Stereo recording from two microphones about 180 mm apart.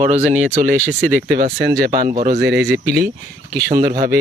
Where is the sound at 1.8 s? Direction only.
50° right (ahead or behind).